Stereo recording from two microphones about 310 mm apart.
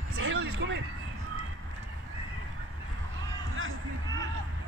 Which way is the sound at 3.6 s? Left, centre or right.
Right.